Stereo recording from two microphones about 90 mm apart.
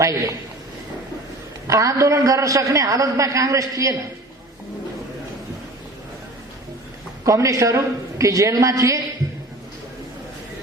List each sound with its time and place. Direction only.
0.0 s a man's voice: 40° right (ahead or behind)
1.6 s a man's voice: 35° right (ahead or behind)
7.3 s a man's voice: 35° right (ahead or behind)